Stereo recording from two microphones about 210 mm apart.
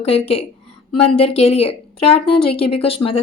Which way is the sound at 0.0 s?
30° left (ahead or behind).